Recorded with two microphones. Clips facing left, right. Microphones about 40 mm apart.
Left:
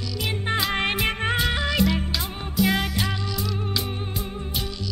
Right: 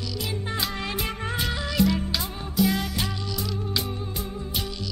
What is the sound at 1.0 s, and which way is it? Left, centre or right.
Music, left.